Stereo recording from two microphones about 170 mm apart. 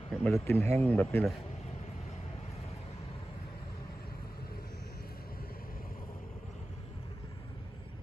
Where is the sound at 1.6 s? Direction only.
40° left (ahead or behind).